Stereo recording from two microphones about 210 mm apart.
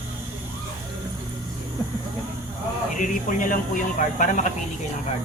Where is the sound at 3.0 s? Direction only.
40° left (ahead or behind).